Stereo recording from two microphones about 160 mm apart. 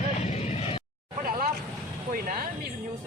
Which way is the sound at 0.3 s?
45° left (ahead or behind).